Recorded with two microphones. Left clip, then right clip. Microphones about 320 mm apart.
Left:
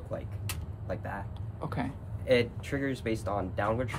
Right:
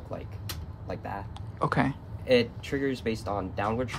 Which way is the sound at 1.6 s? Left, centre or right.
Right.